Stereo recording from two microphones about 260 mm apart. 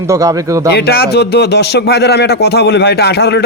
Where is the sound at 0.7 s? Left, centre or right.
Left.